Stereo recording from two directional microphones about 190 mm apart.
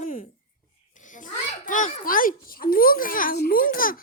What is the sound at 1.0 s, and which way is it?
A child's voice, 45° left (ahead or behind).